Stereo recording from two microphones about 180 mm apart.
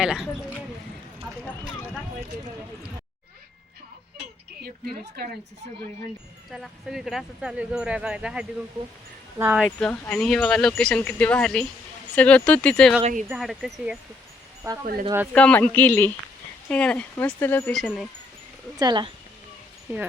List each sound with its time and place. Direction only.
0.0 s speech: 5° right (ahead or behind)
5.2 s a woman's voice: 65° right (ahead or behind)
6.5 s speech: centre (ahead or behind)
13.0 s speech: 45° right (ahead or behind)
13.2 s speech: 5° right (ahead or behind)
14.6 s speech: 15° right (ahead or behind)
15.3 s speech: 5° left (ahead or behind)
18.8 s speech: 25° right (ahead or behind)